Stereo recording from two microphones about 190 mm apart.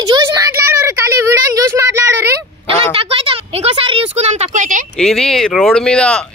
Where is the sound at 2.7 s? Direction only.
30° right (ahead or behind).